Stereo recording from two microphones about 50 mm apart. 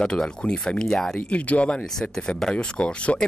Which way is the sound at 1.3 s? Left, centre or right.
Left.